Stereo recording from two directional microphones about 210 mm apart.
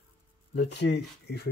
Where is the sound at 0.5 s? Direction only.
55° left (ahead or behind).